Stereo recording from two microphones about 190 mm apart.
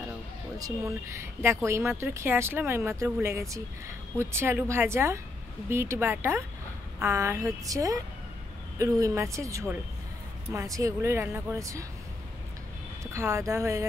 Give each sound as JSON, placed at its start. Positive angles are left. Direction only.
{"t": 0.6, "sound": "speech", "side_deg": -15}
{"t": 13.0, "sound": "speech", "side_deg": -15}